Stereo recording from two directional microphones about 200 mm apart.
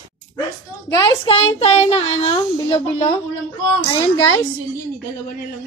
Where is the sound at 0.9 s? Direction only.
20° left (ahead or behind).